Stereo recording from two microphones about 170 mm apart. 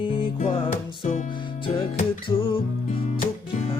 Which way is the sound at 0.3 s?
45° left (ahead or behind).